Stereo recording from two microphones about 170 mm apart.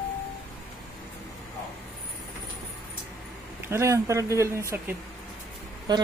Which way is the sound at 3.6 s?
15° right (ahead or behind).